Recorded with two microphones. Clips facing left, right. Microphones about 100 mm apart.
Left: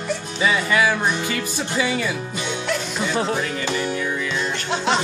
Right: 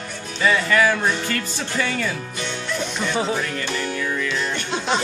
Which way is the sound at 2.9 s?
5° left (ahead or behind).